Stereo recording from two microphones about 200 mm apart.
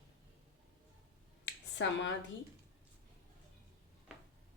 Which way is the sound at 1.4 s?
65° left (ahead or behind).